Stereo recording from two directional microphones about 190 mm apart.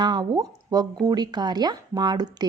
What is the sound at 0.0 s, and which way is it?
Speech, 25° right (ahead or behind).